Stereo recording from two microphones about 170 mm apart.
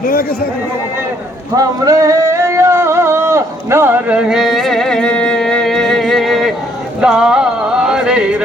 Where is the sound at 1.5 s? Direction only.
20° right (ahead or behind); by 6.5 s centre (ahead or behind).